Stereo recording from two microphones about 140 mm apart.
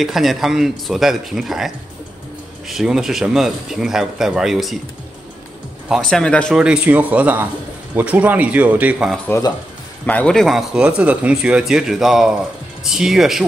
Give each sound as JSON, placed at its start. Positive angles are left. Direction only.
{"t": 0.0, "sound": "speech", "side_deg": 0}
{"t": 2.7, "sound": "speech", "side_deg": -5}
{"t": 5.9, "sound": "speech", "side_deg": 5}
{"t": 6.5, "sound": "speech", "side_deg": -5}
{"t": 9.3, "sound": "speech", "side_deg": 20}
{"t": 10.0, "sound": "speech", "side_deg": 10}